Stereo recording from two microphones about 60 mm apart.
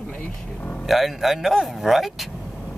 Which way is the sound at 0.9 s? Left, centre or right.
Centre.